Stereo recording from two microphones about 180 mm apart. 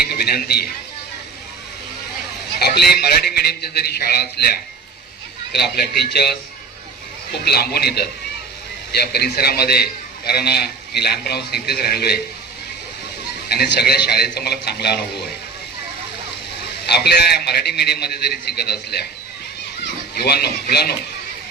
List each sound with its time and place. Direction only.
0.1 s a sound: 60° left (ahead or behind)
2.6 s a man's voice: 65° left (ahead or behind)
7.4 s a man's voice: 60° left (ahead or behind)
13.5 s a man's voice: 60° left (ahead or behind)
16.9 s a man's voice: 65° left (ahead or behind)